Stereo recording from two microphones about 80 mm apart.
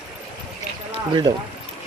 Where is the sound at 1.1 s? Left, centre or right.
Right.